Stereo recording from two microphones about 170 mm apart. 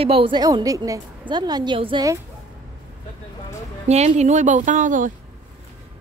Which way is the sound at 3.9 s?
40° right (ahead or behind).